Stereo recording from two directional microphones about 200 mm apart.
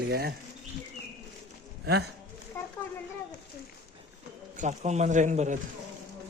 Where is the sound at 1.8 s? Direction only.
55° right (ahead or behind).